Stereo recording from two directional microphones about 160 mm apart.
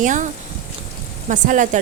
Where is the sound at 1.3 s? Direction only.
50° right (ahead or behind).